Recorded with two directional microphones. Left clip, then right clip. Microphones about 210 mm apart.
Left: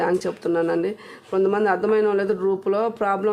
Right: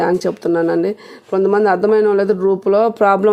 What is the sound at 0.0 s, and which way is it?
Speech, 20° right (ahead or behind).